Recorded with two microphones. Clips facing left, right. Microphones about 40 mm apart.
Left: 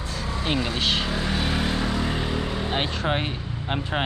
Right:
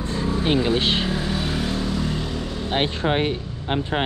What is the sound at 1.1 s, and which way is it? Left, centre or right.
Vehicle, centre.